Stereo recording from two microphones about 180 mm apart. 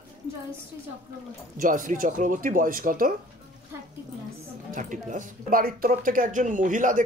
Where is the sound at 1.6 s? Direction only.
45° right (ahead or behind).